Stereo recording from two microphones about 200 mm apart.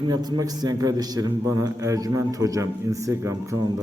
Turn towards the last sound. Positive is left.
turn(degrees=-15)  # may be behind; listen again after turning